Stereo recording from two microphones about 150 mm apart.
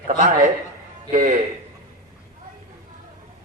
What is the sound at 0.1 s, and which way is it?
A man's voice, 60° right (ahead or behind).